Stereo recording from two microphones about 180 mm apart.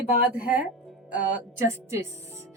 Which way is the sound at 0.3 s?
50° left (ahead or behind).